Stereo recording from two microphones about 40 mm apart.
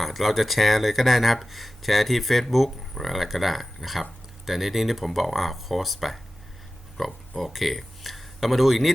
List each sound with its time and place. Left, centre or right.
0.0 s speech: centre